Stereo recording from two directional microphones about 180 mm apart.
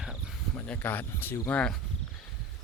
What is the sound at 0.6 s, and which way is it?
Speech, 10° left (ahead or behind).